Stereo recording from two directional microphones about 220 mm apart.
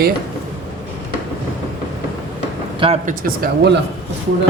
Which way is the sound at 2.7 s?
25° right (ahead or behind).